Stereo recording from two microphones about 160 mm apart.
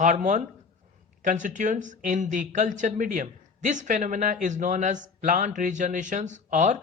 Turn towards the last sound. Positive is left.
turn(degrees=-50)  # may be behind; listen again after turning